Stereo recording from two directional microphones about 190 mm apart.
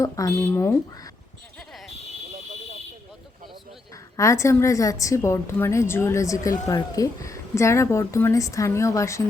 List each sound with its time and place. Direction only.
0.0 s a woman's voice: 15° left (ahead or behind)
1.5 s a sound: centre (ahead or behind)
3.9 s a woman's voice: 15° left (ahead or behind)